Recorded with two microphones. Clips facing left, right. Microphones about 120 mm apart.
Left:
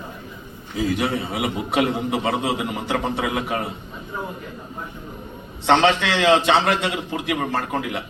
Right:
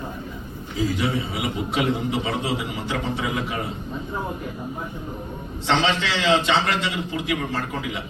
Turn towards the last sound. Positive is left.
turn(degrees=60)  # may be behind; listen again after turning